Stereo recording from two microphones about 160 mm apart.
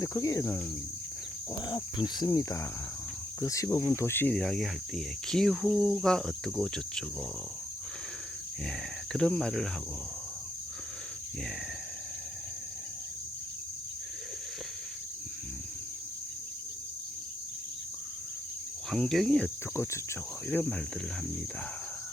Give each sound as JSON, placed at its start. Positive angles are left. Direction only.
{"t": 0.0, "sound": "speech", "side_deg": 20}
{"t": 1.6, "sound": "speech", "side_deg": 25}
{"t": 3.4, "sound": "cricket", "side_deg": 20}
{"t": 9.1, "sound": "cricket", "side_deg": 5}
{"t": 18.9, "sound": "cricket", "side_deg": 0}
{"t": 19.7, "sound": "speech", "side_deg": 15}